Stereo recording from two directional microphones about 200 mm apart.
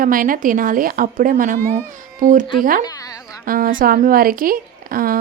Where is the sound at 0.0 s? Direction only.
45° right (ahead or behind).